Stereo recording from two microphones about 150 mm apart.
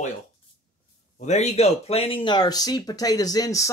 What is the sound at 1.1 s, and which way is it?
Speech, 50° left (ahead or behind).